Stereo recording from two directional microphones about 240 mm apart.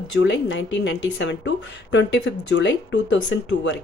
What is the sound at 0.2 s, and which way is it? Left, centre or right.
Speech, left.